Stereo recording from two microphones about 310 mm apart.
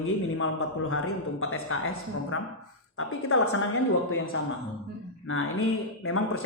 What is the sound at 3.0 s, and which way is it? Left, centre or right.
Speech, left.